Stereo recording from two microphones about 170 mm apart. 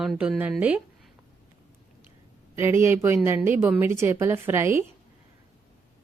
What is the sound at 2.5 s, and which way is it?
A woman's voice, 15° right (ahead or behind).